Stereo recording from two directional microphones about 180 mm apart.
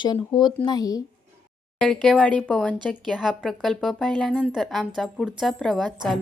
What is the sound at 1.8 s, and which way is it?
A woman's voice, 5° left (ahead or behind).